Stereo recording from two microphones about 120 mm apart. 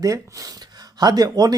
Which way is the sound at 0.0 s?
30° right (ahead or behind).